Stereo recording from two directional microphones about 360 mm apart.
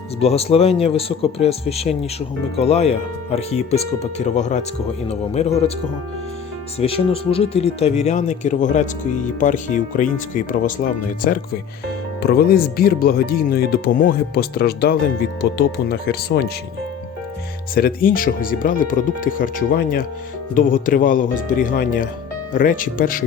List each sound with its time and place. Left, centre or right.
0.2 s speech: centre
6.7 s speech: centre
12.2 s speech: left
17.7 s speech: left